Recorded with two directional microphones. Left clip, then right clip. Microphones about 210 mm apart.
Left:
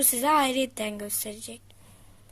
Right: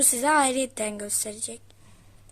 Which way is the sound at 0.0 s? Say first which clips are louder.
Right 1 dB; 10° right (ahead or behind).